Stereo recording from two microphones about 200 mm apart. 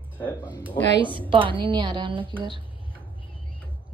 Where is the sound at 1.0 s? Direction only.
25° right (ahead or behind).